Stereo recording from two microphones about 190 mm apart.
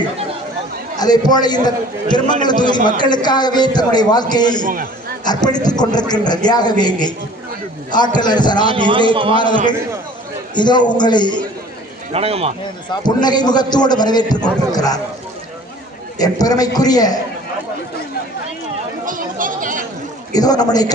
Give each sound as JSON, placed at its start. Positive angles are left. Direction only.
{"t": 0.9, "sound": "a man's voice", "side_deg": 20}
{"t": 4.6, "sound": "a man's voice", "side_deg": -45}
{"t": 5.2, "sound": "a man's voice", "side_deg": 20}
{"t": 8.7, "sound": "a man's voice", "side_deg": -25}
{"t": 9.4, "sound": "a man's voice", "side_deg": 25}
{"t": 12.1, "sound": "speech", "side_deg": -30}
{"t": 12.9, "sound": "a man's voice", "side_deg": 20}
{"t": 16.1, "sound": "a man's voice", "side_deg": 20}
{"t": 19.0, "sound": "chatter", "side_deg": -45}
{"t": 20.3, "sound": "a man's voice", "side_deg": 20}